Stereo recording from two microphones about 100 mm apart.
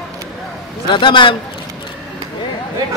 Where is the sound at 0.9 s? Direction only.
55° left (ahead or behind).